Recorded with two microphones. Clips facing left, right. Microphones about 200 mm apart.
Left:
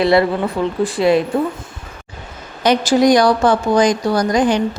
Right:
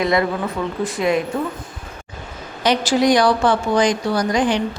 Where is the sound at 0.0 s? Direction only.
30° left (ahead or behind).